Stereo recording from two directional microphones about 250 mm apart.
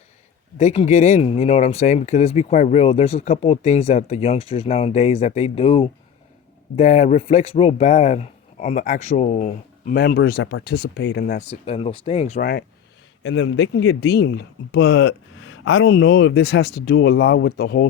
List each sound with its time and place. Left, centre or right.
0.6 s speech: left
11.4 s speech: left
13.2 s speech: left